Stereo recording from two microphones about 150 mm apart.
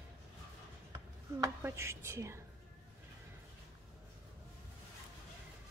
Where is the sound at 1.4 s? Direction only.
20° right (ahead or behind).